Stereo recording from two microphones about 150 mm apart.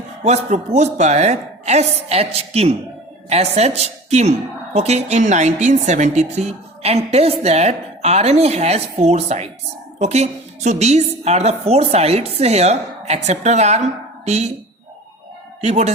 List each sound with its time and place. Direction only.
0.2 s a woman's voice: 50° right (ahead or behind)
15.6 s a woman's voice: 45° right (ahead or behind)